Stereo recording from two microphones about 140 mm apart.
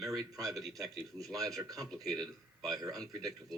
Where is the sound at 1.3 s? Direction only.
25° right (ahead or behind).